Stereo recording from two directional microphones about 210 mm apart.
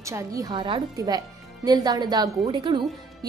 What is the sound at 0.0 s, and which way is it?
A woman's voice, 15° right (ahead or behind).